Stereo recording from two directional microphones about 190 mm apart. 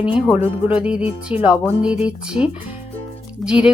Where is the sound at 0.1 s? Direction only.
5° right (ahead or behind).